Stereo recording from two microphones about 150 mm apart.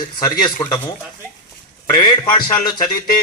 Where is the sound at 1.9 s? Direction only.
25° left (ahead or behind).